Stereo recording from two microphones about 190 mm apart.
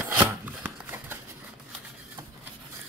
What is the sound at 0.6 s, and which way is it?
Horse, 10° right (ahead or behind).